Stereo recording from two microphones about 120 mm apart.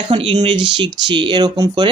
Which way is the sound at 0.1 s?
50° right (ahead or behind).